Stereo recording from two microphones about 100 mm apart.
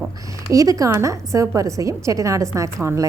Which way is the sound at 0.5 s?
35° right (ahead or behind).